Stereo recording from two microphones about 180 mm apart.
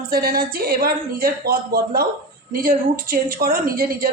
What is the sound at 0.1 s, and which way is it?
A man's voice, 55° right (ahead or behind).